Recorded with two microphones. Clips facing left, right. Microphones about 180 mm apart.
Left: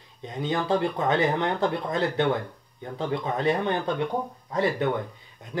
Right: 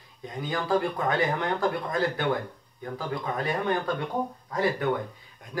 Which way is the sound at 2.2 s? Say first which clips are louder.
Left 3 dB; 25° left (ahead or behind).